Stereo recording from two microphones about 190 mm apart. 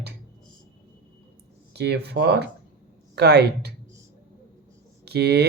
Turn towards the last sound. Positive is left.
turn(degrees=-60)  # may be behind; listen again after turning